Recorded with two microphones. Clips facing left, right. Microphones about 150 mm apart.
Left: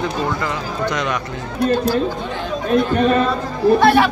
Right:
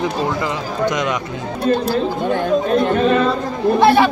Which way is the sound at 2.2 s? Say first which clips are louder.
Right 5 dB; 55° right (ahead or behind).